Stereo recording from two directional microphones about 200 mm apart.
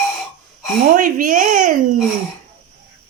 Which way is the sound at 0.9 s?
40° right (ahead or behind).